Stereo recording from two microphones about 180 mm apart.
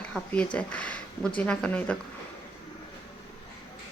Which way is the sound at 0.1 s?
5° left (ahead or behind).